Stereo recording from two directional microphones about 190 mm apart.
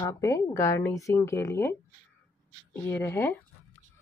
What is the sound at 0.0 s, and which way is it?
Speech, 15° left (ahead or behind).